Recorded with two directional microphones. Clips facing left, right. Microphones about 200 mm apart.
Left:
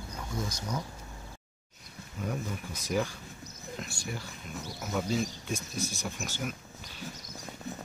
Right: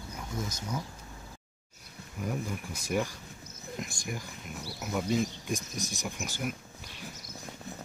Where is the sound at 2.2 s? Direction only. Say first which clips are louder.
Right 1 dB; 10° right (ahead or behind).